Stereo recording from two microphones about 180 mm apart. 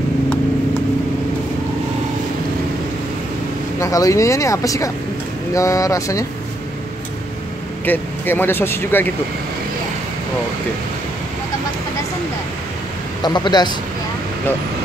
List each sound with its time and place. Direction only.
3.8 s speech: 15° left (ahead or behind)
7.8 s speech: 10° left (ahead or behind)
13.2 s speech: 25° left (ahead or behind)